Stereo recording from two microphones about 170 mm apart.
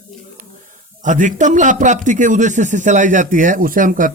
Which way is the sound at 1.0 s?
45° right (ahead or behind).